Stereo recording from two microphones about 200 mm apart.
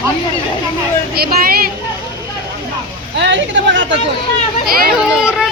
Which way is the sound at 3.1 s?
60° right (ahead or behind).